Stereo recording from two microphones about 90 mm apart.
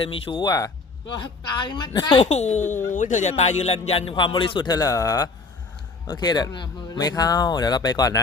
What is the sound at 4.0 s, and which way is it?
Speech, 75° left (ahead or behind).